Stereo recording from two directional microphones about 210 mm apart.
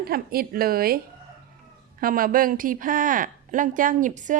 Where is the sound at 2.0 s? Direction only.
40° right (ahead or behind).